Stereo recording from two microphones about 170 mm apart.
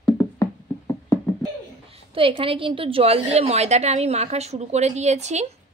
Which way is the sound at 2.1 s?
30° right (ahead or behind).